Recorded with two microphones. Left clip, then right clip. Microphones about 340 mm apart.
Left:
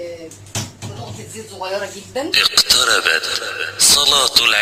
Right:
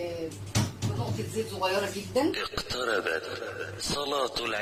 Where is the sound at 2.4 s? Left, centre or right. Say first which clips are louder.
Left 18 dB; left.